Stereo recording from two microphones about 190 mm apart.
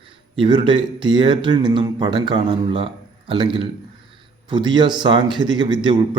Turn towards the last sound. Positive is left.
turn(degrees=-25)  # may be behind; listen again after turning